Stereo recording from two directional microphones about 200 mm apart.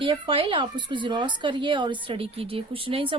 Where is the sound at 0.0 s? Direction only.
25° right (ahead or behind).